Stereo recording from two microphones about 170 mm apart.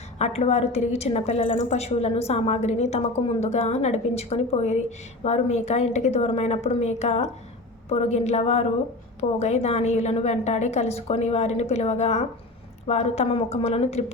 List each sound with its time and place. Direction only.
0.2 s a woman's voice: 40° left (ahead or behind)